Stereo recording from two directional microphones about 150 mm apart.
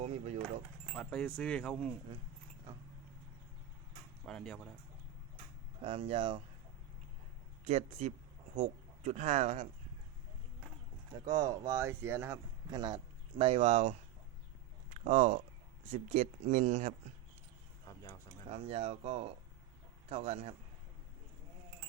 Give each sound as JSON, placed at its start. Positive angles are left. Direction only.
{"t": 0.0, "sound": "speech", "side_deg": -45}
{"t": 0.9, "sound": "speech", "side_deg": 5}
{"t": 4.3, "sound": "speech", "side_deg": 5}
{"t": 5.8, "sound": "speech", "side_deg": -40}
{"t": 7.7, "sound": "speech", "side_deg": -50}
{"t": 11.3, "sound": "speech", "side_deg": -25}
{"t": 12.7, "sound": "speech", "side_deg": -25}
{"t": 13.4, "sound": "speech", "side_deg": -45}
{"t": 14.9, "sound": "speech", "side_deg": -60}
{"t": 18.4, "sound": "speech", "side_deg": -45}